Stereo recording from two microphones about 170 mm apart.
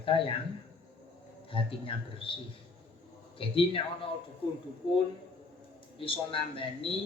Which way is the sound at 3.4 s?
30° left (ahead or behind).